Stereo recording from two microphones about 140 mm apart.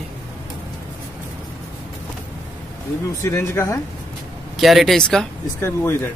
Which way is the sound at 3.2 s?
20° left (ahead or behind).